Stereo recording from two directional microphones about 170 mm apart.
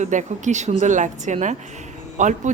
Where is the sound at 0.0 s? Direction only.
45° right (ahead or behind).